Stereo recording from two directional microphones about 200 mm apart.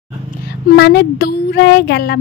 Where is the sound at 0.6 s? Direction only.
55° left (ahead or behind).